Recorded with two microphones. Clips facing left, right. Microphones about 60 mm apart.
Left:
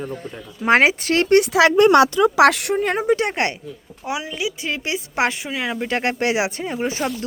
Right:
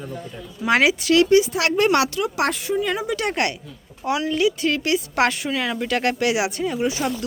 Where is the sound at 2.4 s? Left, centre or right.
Left.